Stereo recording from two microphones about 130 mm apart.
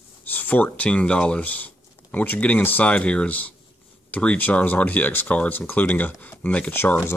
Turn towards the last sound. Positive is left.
turn(degrees=15)  # may be behind; listen again after turning